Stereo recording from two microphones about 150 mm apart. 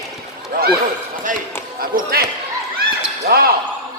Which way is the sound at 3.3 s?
90° right.